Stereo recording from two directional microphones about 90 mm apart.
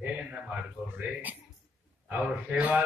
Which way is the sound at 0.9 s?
20° right (ahead or behind).